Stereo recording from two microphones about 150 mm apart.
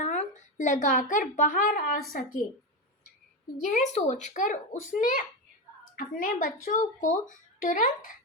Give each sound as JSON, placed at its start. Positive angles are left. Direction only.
{"t": 0.0, "sound": "a woman's voice", "side_deg": 50}
{"t": 3.6, "sound": "a child's voice", "side_deg": 55}
{"t": 6.7, "sound": "a child's voice", "side_deg": 55}